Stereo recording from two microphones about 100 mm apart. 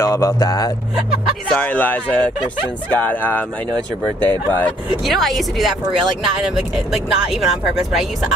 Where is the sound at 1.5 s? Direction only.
15° left (ahead or behind).